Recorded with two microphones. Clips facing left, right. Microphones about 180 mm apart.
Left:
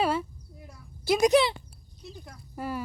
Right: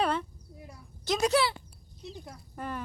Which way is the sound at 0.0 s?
5° left (ahead or behind).